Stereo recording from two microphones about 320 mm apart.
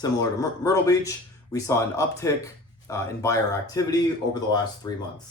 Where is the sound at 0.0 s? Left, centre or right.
Centre.